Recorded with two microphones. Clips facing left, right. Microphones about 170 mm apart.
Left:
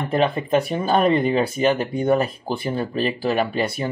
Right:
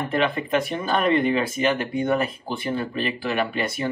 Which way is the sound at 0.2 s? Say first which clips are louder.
Left 4 dB; 35° left (ahead or behind).